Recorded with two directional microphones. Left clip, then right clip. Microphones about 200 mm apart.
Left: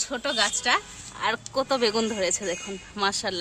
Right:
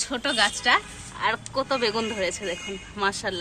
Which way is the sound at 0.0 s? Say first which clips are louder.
Right 2 dB; 40° left (ahead or behind).